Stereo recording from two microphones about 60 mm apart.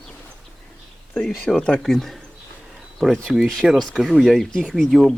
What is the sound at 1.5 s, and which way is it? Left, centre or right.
Speech, centre.